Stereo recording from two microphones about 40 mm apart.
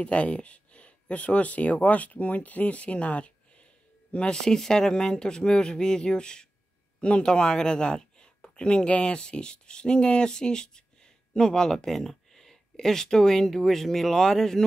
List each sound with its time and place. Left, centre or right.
0.0 s speech: left
4.4 s speech: centre